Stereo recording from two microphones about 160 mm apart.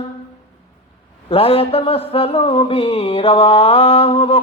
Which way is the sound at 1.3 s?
35° left (ahead or behind).